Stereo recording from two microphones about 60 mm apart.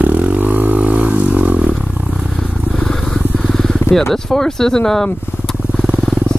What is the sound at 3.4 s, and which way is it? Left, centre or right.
Vehicle, centre.